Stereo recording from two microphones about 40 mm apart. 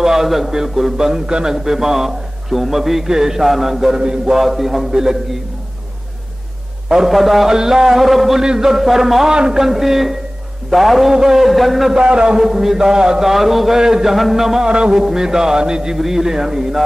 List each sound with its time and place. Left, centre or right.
0.0 s a man's voice: centre
4.0 s a man's voice: right
4.4 s a man's voice: centre
7.1 s a man's voice: centre
8.4 s a man's voice: centre
9.3 s a man's voice: centre
12.0 s a man's voice: right
12.4 s a man's voice: centre
13.7 s a man's voice: centre
14.1 s a man's voice: centre
14.7 s a man's voice: right